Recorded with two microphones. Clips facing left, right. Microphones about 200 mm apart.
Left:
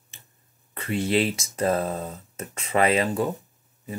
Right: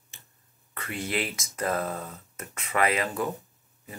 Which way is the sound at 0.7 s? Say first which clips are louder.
Left 8 dB; 25° left (ahead or behind).